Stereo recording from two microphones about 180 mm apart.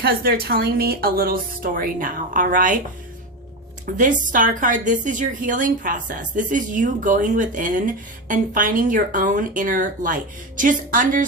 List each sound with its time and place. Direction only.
0.0 s a woman's voice: 60° right (ahead or behind)
3.8 s a woman's voice: 50° right (ahead or behind)